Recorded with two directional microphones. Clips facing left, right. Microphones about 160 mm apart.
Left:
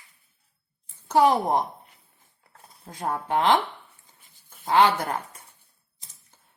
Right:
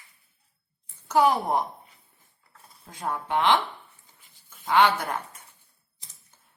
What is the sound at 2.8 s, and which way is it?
Speech, 35° left (ahead or behind).